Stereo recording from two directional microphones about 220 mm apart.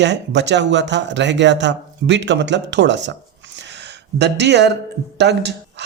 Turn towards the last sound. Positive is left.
turn(degrees=-50)  # may be behind; listen again after turning